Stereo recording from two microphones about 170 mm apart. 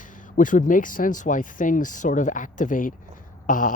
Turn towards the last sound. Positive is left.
turn(degrees=50)  # may be behind; listen again after turning